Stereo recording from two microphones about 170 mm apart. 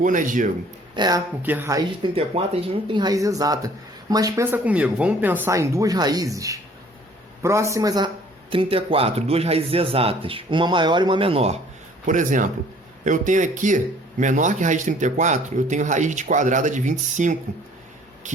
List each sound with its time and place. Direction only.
0.0 s speech: 50° right (ahead or behind)
0.9 s speech: 25° right (ahead or behind)
1.4 s speech: 10° right (ahead or behind)
2.1 s a man's voice: 35° right (ahead or behind)
12.0 s speech: 50° right (ahead or behind)